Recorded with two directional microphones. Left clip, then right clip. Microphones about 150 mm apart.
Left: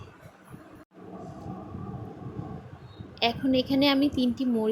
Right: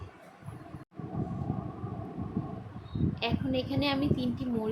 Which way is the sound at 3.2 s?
50° left (ahead or behind).